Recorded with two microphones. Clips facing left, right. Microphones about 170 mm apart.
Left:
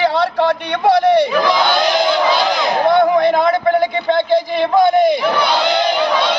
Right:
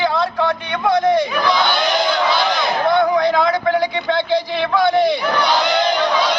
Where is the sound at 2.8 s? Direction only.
55° left (ahead or behind).